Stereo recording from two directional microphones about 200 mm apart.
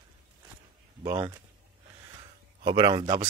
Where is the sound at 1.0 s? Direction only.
15° right (ahead or behind).